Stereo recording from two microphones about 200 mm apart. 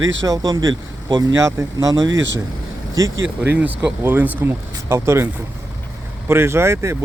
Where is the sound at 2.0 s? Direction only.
65° right (ahead or behind).